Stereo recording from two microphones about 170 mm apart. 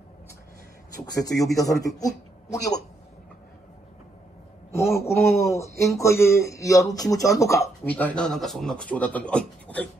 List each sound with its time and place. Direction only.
1.2 s a man's voice: 20° left (ahead or behind)
4.7 s a man's voice: 15° left (ahead or behind)